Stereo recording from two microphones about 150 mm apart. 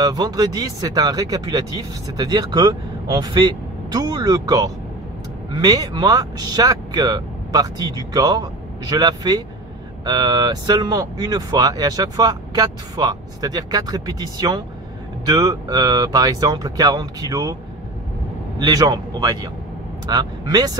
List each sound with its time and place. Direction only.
0.0 s speech: 25° right (ahead or behind)
18.7 s speech: 25° right (ahead or behind)